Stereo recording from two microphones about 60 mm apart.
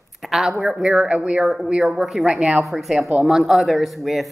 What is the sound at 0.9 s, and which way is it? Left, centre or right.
A woman's voice, right.